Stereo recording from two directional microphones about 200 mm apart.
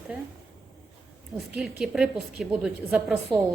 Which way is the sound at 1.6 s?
5° right (ahead or behind).